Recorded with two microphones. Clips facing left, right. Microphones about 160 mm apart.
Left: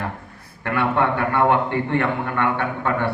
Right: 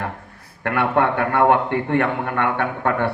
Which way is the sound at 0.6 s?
60° right (ahead or behind).